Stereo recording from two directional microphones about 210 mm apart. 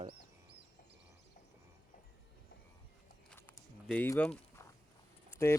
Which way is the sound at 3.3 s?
10° left (ahead or behind).